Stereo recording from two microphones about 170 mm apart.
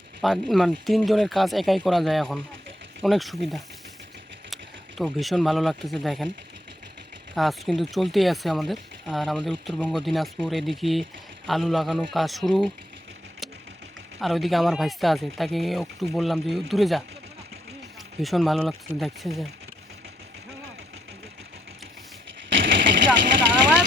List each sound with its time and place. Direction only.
0.2 s speech: centre (ahead or behind)
7.3 s speech: centre (ahead or behind)
14.2 s speech: centre (ahead or behind)
18.2 s speech: centre (ahead or behind)
22.4 s a sound: 90° right